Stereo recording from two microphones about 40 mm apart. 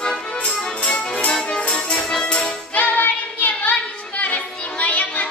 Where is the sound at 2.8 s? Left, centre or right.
Left.